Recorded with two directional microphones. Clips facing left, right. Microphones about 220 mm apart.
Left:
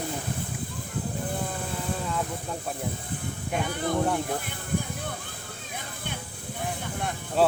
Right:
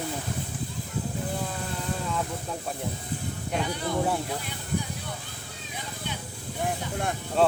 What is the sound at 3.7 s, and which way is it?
Speech, 50° left (ahead or behind).